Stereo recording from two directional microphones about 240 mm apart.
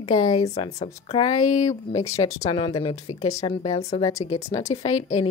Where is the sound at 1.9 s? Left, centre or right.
Centre.